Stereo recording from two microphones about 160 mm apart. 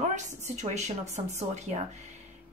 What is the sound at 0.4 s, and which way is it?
Speech, 45° right (ahead or behind).